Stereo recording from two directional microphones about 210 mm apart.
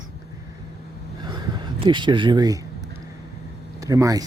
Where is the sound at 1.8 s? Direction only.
25° right (ahead or behind).